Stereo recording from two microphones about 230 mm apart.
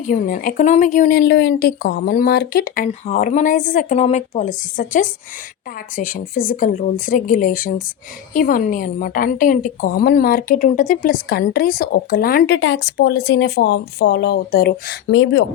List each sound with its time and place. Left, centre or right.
0.1 s a woman's voice: left
12.5 s speech: left
15.1 s speech: left